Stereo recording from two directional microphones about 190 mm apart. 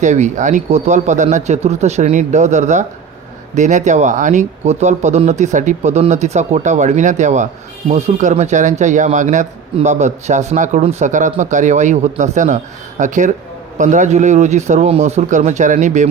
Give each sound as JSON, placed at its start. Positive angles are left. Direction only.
{"t": 0.0, "sound": "speech", "side_deg": -40}